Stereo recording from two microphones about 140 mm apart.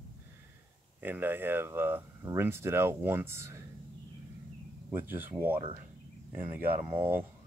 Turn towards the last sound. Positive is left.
turn(degrees=-15)  # may be behind; listen again after turning